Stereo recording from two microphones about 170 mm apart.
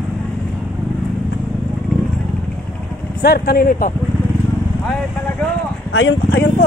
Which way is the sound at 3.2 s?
65° left (ahead or behind).